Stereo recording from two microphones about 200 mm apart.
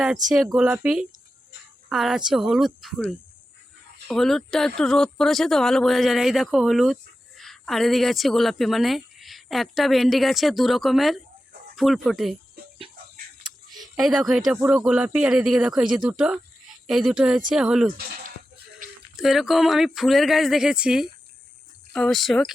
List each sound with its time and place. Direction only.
0.5 s speech: 5° right (ahead or behind)
13.4 s a sound: 20° right (ahead or behind)
13.8 s speech: centre (ahead or behind)
19.1 s speech: centre (ahead or behind)